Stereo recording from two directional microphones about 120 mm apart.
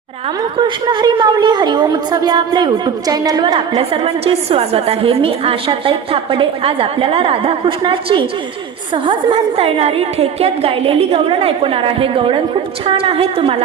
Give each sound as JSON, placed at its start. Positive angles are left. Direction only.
{"t": 0.9, "sound": "a woman's voice", "side_deg": -35}
{"t": 3.8, "sound": "a woman's voice", "side_deg": -50}